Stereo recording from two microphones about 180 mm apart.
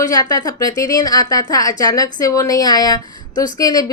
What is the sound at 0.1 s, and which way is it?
A woman's voice, 20° left (ahead or behind).